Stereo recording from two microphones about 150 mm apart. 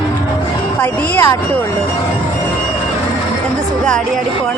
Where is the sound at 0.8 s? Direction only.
10° left (ahead or behind).